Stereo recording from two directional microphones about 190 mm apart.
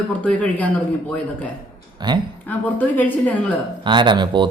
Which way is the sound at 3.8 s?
25° right (ahead or behind).